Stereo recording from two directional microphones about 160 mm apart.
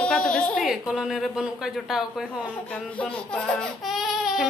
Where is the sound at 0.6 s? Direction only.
5° right (ahead or behind).